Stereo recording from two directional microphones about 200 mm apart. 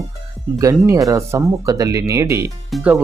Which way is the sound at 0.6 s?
15° right (ahead or behind).